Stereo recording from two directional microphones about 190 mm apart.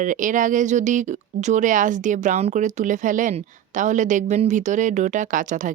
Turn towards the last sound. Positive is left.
turn(degrees=-40)  # may be behind; listen again after turning